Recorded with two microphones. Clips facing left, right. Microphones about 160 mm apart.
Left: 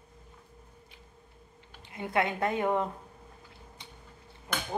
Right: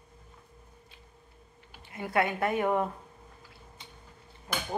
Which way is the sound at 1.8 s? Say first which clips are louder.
Right 1 dB; 20° left (ahead or behind).